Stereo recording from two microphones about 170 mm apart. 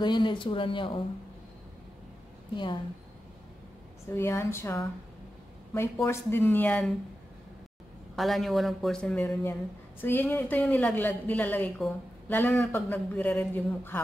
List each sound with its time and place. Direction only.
0.0 s speech: 25° left (ahead or behind)
2.5 s speech: 25° left (ahead or behind)
4.1 s a woman's voice: 15° left (ahead or behind)
6.0 s a woman's voice: 15° left (ahead or behind)
8.2 s a woman's voice: centre (ahead or behind)